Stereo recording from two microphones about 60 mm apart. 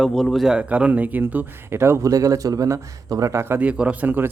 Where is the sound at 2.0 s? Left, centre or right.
Right.